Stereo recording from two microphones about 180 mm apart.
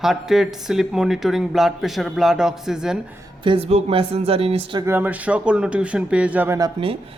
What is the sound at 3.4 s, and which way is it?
Speech, 30° right (ahead or behind).